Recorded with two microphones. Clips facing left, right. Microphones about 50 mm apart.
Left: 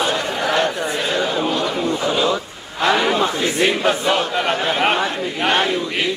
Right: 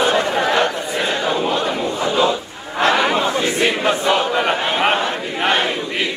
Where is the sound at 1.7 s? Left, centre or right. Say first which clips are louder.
Even; right.